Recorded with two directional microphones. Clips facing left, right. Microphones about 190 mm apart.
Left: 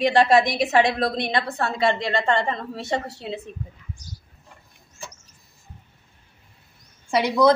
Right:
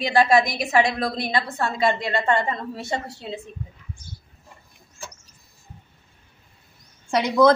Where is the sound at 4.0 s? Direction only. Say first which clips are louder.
Left 1 dB; 40° left (ahead or behind).